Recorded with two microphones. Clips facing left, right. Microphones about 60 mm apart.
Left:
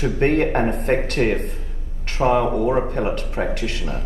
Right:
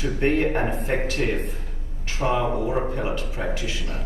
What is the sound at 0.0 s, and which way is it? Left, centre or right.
Speech, left.